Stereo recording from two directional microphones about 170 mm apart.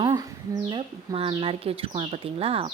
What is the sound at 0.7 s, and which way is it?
Speech, 30° right (ahead or behind).